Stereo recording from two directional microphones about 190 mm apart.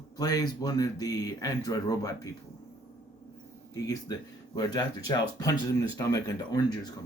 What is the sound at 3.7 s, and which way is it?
Speech, 20° left (ahead or behind).